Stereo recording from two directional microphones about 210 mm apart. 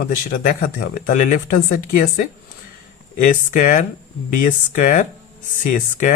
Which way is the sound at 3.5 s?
40° left (ahead or behind).